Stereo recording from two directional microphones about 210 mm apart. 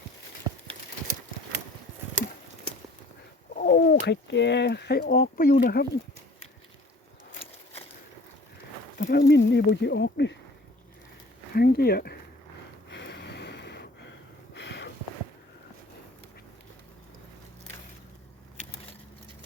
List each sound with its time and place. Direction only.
3.6 s speech: 45° left (ahead or behind)
9.0 s a sound: 40° left (ahead or behind)
9.2 s speech: 55° left (ahead or behind)
11.5 s speech: 50° left (ahead or behind)
12.9 s snort: 55° left (ahead or behind)
14.5 s a sound: 55° left (ahead or behind)